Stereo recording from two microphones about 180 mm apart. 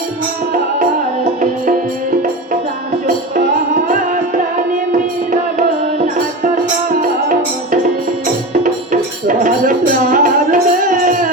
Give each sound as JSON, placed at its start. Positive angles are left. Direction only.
{"t": 8.6, "sound": "music", "side_deg": -45}